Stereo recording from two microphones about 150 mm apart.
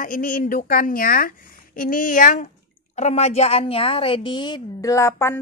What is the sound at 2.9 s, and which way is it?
A woman's voice, 50° left (ahead or behind).